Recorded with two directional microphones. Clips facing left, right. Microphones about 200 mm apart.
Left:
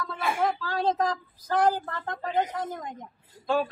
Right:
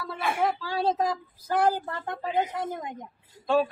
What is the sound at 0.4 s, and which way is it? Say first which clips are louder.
Speech: right 1 dB; 5° right (ahead or behind).